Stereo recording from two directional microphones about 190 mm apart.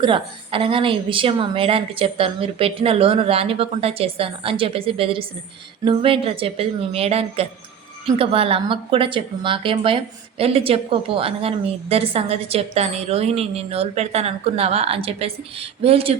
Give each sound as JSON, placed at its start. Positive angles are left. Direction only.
{"t": 0.0, "sound": "a woman's voice", "side_deg": -25}